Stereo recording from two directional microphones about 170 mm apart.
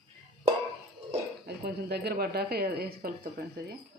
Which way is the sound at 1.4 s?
70° right (ahead or behind).